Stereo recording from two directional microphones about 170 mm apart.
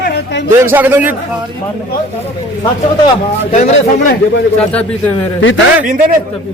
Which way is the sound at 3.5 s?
50° left (ahead or behind).